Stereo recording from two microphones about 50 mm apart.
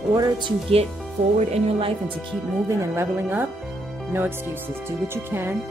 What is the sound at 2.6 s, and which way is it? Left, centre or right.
Speech, right.